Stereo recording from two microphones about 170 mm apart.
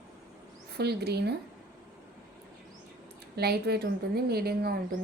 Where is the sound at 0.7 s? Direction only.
70° right (ahead or behind).